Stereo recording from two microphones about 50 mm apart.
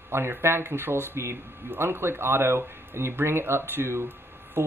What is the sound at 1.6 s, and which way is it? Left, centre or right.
Speech, right.